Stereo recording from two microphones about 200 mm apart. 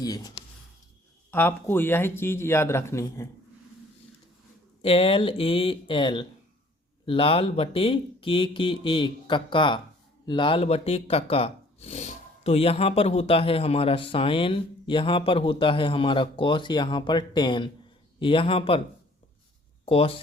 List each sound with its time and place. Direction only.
0.0 s speech: 20° left (ahead or behind)
4.8 s speech: 30° left (ahead or behind)
19.8 s speech: 30° left (ahead or behind)